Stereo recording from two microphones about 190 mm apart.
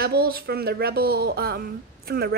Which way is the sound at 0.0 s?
55° right (ahead or behind).